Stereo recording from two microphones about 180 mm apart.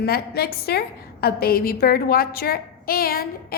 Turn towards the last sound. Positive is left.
turn(degrees=55)  # may be behind; listen again after turning